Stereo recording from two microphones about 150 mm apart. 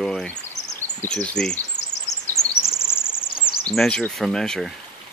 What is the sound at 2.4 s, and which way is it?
Bird vocalization, 45° left (ahead or behind).